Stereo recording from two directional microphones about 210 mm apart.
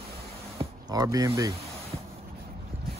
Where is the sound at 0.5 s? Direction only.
20° right (ahead or behind).